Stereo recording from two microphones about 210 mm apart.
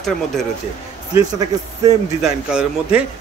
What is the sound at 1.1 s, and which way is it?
Speech, 15° right (ahead or behind).